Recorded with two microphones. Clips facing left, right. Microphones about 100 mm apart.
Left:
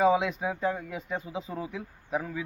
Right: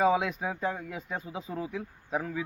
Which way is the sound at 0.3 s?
Centre (ahead or behind).